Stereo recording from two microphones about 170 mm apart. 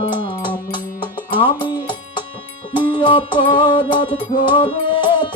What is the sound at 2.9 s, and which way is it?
Music, 30° left (ahead or behind).